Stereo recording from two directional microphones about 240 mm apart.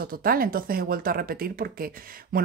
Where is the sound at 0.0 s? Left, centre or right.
Right.